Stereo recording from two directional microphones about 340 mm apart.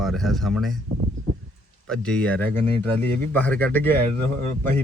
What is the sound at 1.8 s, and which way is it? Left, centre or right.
A man's voice, centre.